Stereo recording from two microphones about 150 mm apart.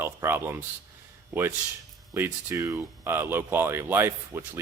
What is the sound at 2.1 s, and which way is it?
Speech, 15° right (ahead or behind).